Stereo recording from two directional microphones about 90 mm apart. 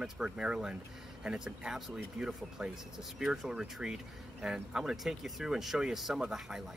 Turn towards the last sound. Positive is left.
turn(degrees=-5)  # may be behind; listen again after turning